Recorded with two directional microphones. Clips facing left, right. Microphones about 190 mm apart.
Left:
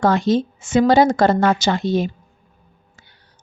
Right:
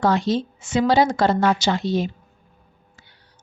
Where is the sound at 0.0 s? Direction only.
50° left (ahead or behind).